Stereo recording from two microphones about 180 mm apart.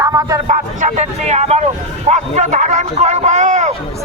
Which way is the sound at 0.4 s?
40° right (ahead or behind).